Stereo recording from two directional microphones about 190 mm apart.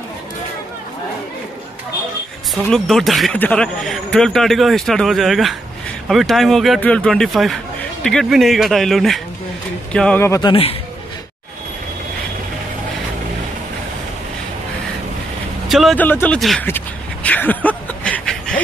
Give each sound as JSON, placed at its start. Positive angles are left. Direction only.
{"t": 2.5, "sound": "speech", "side_deg": 0}
{"t": 10.5, "sound": "speech", "side_deg": 30}
{"t": 15.7, "sound": "speech", "side_deg": 0}
{"t": 16.6, "sound": "a sound", "side_deg": 10}